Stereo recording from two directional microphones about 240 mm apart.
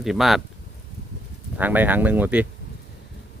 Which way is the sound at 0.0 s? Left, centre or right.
Centre.